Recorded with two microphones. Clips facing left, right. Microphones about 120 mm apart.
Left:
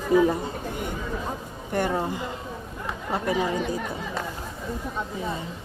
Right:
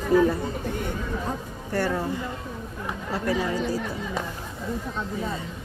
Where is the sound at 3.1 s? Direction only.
20° left (ahead or behind).